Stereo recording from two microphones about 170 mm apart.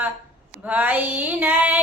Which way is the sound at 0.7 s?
10° right (ahead or behind).